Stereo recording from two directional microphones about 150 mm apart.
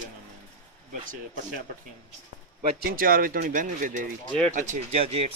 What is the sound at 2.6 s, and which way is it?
Speech, 70° right (ahead or behind).